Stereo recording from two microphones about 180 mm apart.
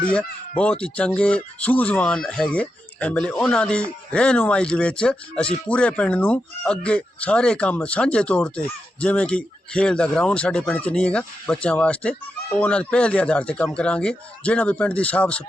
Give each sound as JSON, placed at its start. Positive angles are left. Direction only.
{"t": 0.0, "sound": "speech", "side_deg": 5}